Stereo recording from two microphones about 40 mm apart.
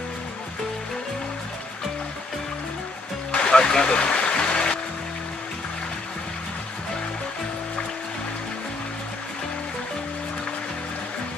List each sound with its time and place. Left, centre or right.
3.3 s music: left